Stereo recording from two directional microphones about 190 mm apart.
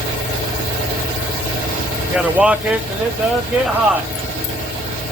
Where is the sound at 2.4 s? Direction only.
5° right (ahead or behind).